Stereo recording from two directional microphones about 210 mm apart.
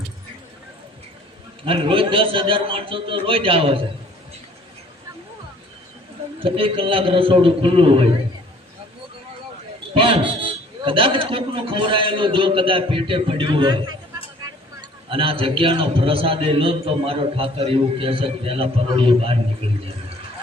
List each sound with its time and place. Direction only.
1.6 s a man's voice: 25° right (ahead or behind)
6.4 s a man's voice: 25° right (ahead or behind)
9.9 s a man's voice: 25° right (ahead or behind)